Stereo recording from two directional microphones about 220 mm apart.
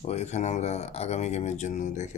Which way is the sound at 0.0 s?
30° left (ahead or behind).